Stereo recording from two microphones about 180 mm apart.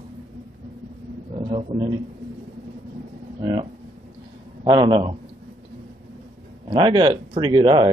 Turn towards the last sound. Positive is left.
turn(degrees=-25)  # may be behind; listen again after turning